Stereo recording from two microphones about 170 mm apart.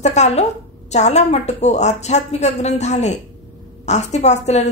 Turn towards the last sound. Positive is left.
turn(degrees=40)  # may be behind; listen again after turning